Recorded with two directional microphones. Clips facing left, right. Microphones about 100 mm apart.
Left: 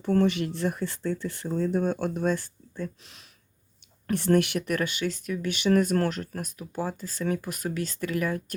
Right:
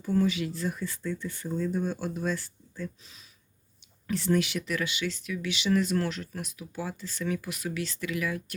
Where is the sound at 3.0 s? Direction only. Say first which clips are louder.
Left 2 dB; 70° left (ahead or behind).